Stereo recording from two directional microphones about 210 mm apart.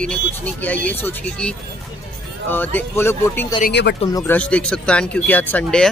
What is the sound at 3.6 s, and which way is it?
Speech, 55° left (ahead or behind).